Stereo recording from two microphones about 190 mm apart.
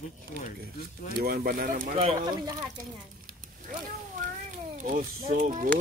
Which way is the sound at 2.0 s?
25° right (ahead or behind).